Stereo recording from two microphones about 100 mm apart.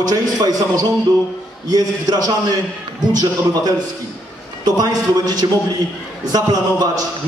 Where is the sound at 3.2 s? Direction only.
40° right (ahead or behind).